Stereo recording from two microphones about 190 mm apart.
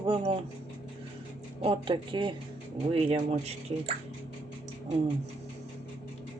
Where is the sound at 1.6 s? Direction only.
25° right (ahead or behind).